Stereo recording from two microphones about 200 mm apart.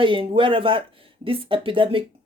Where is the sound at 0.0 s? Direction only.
25° right (ahead or behind).